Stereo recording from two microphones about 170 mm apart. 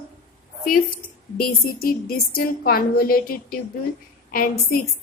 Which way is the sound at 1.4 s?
60° left (ahead or behind).